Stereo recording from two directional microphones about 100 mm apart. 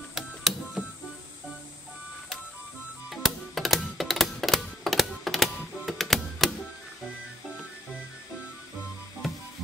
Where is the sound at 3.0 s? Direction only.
Centre (ahead or behind).